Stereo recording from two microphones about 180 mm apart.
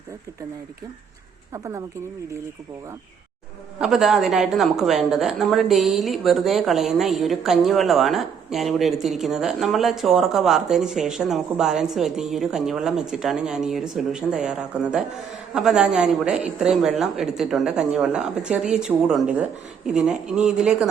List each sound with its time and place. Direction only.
1.5 s speech: 20° right (ahead or behind)
3.8 s speech: centre (ahead or behind)